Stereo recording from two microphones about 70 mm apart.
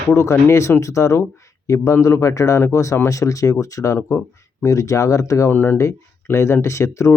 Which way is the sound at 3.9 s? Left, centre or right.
Left.